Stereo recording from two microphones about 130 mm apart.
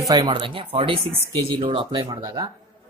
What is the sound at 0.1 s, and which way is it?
Speech, 35° right (ahead or behind).